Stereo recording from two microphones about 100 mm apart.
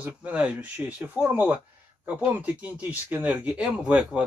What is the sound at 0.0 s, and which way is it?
Speech, 15° right (ahead or behind).